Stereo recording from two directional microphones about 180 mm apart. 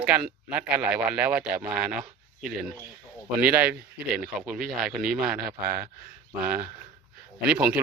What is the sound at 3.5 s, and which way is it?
Speech, 55° right (ahead or behind).